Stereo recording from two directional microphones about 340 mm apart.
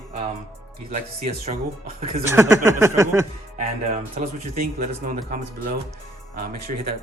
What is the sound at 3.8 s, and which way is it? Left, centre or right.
Speech, right.